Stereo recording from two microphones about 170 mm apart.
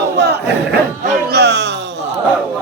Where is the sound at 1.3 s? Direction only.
85° right.